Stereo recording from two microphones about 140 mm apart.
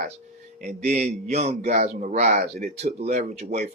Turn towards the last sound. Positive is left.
turn(degrees=-60)  # may be behind; listen again after turning